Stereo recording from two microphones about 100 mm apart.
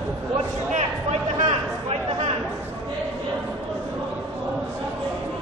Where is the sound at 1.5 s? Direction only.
90° right.